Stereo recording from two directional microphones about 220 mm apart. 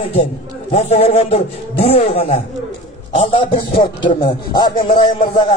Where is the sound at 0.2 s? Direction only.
25° left (ahead or behind).